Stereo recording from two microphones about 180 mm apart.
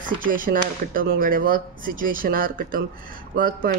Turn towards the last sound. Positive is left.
turn(degrees=-50)  # may be behind; listen again after turning